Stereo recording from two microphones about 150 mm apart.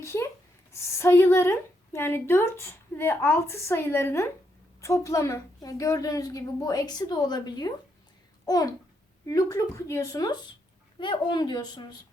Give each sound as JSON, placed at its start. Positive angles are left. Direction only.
{"t": 0.0, "sound": "a woman's voice", "side_deg": 20}